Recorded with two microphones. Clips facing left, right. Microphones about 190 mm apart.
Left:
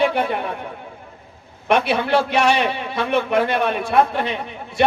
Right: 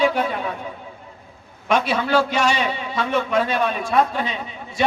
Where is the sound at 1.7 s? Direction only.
60° left (ahead or behind).